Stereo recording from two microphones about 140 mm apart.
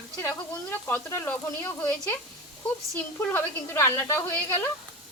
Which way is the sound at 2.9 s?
20° left (ahead or behind).